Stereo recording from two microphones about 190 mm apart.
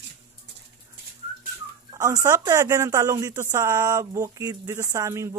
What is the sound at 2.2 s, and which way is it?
Speech, 15° right (ahead or behind).